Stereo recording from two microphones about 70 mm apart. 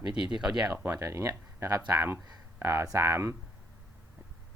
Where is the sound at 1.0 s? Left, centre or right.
Right.